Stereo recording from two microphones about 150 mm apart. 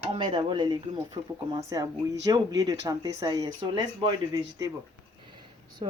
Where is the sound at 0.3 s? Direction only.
30° right (ahead or behind).